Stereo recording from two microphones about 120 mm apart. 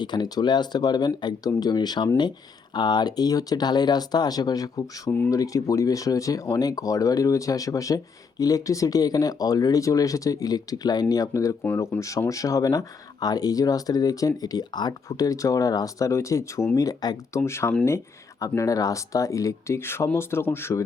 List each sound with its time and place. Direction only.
0.0 s speech: 35° left (ahead or behind)
17.4 s speech: 20° left (ahead or behind)